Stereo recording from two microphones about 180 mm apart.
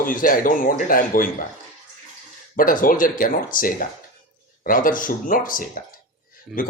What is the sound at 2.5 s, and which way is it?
Speech, 50° left (ahead or behind).